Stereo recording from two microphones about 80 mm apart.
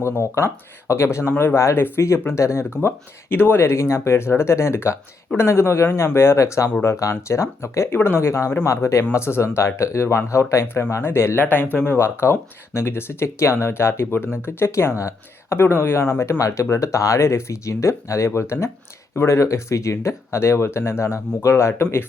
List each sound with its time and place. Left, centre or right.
0.0 s speech: left
2.8 s speech: left
11.5 s speech: left
11.9 s speech: left